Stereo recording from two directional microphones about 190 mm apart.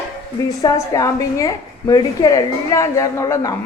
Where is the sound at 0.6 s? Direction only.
15° left (ahead or behind).